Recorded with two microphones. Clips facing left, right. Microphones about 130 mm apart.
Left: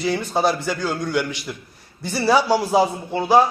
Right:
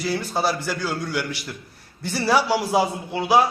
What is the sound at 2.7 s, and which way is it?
Speech, 10° right (ahead or behind).